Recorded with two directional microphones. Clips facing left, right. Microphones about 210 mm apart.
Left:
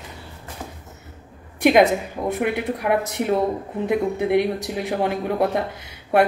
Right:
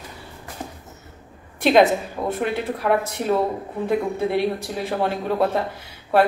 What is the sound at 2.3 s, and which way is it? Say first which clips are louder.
Speech: left 2 dB; 15° left (ahead or behind).